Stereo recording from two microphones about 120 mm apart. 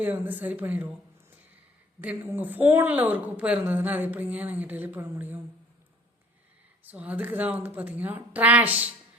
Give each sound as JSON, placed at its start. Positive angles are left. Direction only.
{"t": 0.0, "sound": "a woman's voice", "side_deg": -15}
{"t": 2.0, "sound": "a woman's voice", "side_deg": -15}
{"t": 6.8, "sound": "a woman's voice", "side_deg": -10}